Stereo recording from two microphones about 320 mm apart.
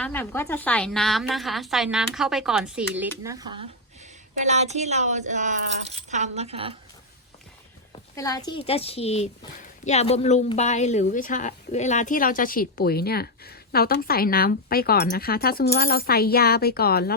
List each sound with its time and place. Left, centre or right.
0.0 s a woman's voice: centre
8.1 s speech: centre; by 17.2 s left